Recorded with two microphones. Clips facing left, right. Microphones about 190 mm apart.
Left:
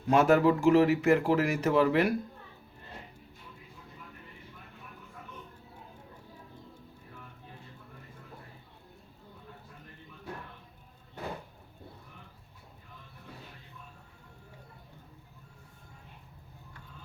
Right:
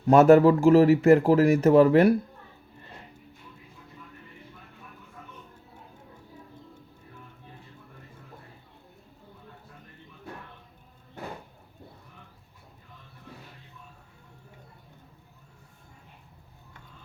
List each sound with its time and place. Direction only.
0.1 s speech: 45° right (ahead or behind)